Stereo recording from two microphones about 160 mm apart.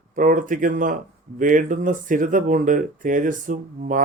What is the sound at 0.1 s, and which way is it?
Speech, 55° right (ahead or behind).